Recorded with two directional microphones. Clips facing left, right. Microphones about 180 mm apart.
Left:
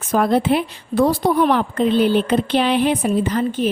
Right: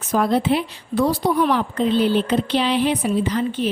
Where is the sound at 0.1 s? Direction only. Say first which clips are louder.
Left 2 dB; 55° left (ahead or behind).